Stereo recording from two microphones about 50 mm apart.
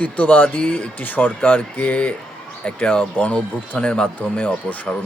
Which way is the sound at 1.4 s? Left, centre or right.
Left.